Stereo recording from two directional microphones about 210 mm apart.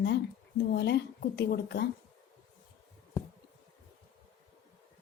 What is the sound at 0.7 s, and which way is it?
A woman's voice, 55° left (ahead or behind).